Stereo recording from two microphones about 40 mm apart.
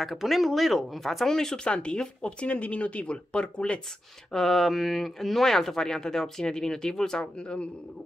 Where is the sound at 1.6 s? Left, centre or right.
Left.